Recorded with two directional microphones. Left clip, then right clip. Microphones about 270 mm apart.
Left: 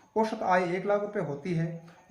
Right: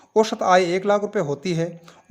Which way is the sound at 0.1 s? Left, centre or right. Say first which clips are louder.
Right 9 dB; right.